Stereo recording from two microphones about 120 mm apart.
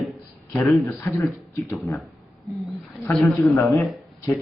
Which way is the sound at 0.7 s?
25° left (ahead or behind).